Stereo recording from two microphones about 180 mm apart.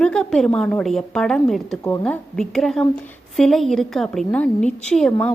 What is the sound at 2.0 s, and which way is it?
A woman's voice, 5° left (ahead or behind).